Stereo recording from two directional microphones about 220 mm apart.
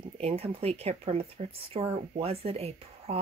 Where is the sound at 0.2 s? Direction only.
25° right (ahead or behind).